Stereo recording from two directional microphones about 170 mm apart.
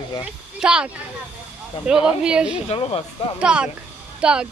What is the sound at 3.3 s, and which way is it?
A child's voice, 5° right (ahead or behind).